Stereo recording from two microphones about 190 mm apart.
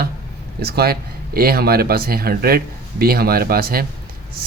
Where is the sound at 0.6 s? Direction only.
55° right (ahead or behind).